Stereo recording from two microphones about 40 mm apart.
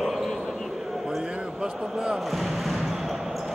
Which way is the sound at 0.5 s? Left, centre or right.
Centre.